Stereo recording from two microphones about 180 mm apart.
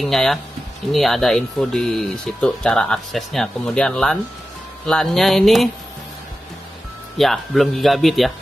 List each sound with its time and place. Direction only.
0.0 s speech: centre (ahead or behind)
7.2 s speech: centre (ahead or behind)